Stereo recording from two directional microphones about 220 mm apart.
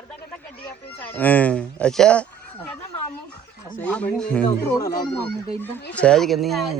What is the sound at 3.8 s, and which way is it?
Speech, 5° left (ahead or behind).